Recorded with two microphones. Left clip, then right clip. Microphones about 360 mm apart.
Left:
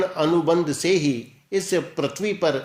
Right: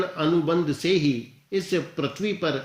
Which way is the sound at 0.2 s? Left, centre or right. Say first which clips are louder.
Left 3 dB; centre.